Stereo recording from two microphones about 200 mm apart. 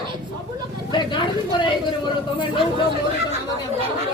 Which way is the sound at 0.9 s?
25° left (ahead or behind).